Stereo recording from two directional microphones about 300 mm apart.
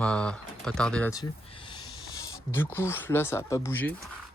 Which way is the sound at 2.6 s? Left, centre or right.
Centre.